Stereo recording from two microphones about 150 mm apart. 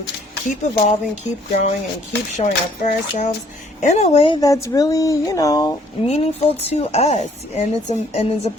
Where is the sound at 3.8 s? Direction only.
50° left (ahead or behind).